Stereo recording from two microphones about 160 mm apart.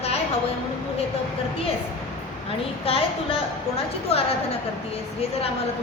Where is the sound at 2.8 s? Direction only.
35° left (ahead or behind).